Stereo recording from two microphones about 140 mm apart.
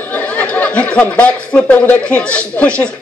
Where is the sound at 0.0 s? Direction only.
10° left (ahead or behind).